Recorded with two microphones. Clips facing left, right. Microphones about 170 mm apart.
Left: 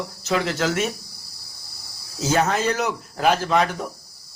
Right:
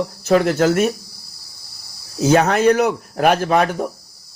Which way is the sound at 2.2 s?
60° right (ahead or behind).